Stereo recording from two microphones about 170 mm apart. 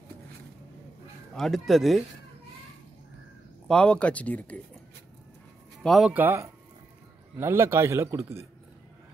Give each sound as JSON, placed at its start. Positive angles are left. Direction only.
{"t": 1.3, "sound": "speech", "side_deg": 0}
{"t": 3.6, "sound": "speech", "side_deg": 5}
{"t": 5.8, "sound": "a man's voice", "side_deg": 0}